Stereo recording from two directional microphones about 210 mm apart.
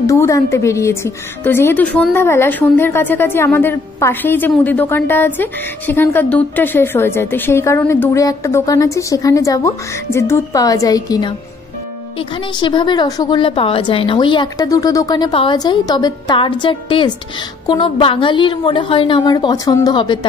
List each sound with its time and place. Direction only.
0.0 s a woman's voice: 15° left (ahead or behind)